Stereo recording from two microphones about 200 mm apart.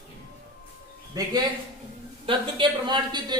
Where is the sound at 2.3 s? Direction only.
25° right (ahead or behind).